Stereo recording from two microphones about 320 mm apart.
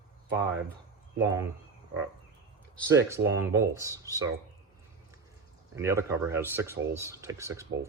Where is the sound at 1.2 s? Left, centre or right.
Centre.